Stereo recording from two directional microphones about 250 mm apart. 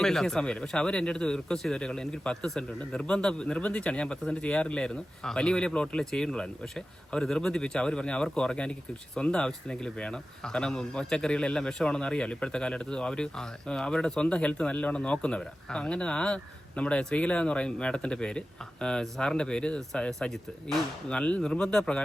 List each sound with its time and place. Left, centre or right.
0.0 s speech: centre